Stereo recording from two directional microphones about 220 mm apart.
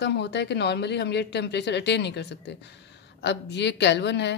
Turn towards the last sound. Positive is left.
turn(degrees=50)  # may be behind; listen again after turning